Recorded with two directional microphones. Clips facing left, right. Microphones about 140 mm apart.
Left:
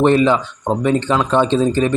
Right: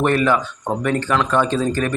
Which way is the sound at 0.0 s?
20° left (ahead or behind).